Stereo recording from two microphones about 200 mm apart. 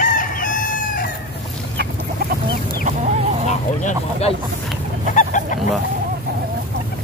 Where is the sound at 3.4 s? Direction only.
35° left (ahead or behind).